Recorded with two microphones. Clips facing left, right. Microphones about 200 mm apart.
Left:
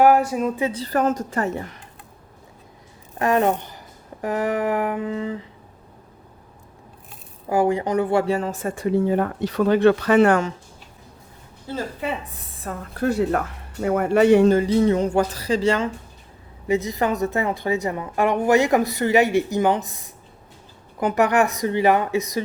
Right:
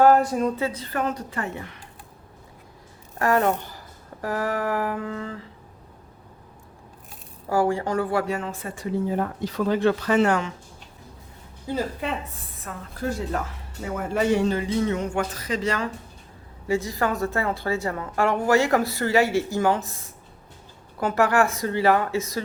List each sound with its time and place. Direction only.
0.0 s speech: 10° left (ahead or behind)
0.6 s speech: 30° left (ahead or behind)
3.2 s a sound: 20° left (ahead or behind)
7.5 s speech: 20° left (ahead or behind); by 10.4 s 55° left (ahead or behind)
11.7 s a woman's voice: 15° right (ahead or behind)
12.0 s a woman's voice: 5° left (ahead or behind)
12.7 s speech: 35° left (ahead or behind)
13.0 s a woman's voice: 65° left (ahead or behind); by 20.0 s 15° left (ahead or behind)
21.0 s a woman's voice: 20° left (ahead or behind)